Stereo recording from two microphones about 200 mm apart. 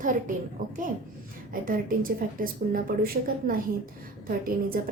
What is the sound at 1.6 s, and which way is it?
Speech, 45° right (ahead or behind).